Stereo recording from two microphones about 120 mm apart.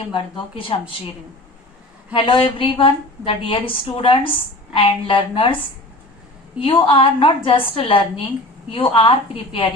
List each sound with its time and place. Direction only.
0.1 s a woman's voice: 45° left (ahead or behind)
2.1 s a woman's voice: 45° left (ahead or behind)
6.6 s a woman's voice: 45° left (ahead or behind)